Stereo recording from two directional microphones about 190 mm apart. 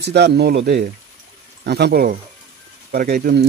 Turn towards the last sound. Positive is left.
turn(degrees=-55)  # may be behind; listen again after turning